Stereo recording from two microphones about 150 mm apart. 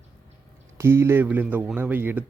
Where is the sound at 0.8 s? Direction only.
15° right (ahead or behind).